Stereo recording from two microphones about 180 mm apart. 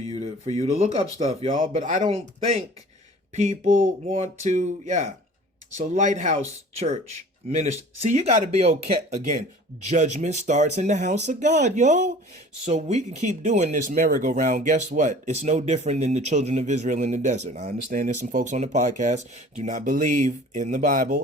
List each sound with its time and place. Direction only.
0.0 s speech: 35° right (ahead or behind)